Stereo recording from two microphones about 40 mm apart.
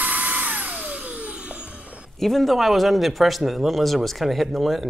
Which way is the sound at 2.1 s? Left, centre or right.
Centre.